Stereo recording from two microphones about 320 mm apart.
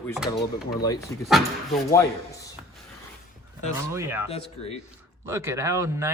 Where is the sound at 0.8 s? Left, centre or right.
Centre.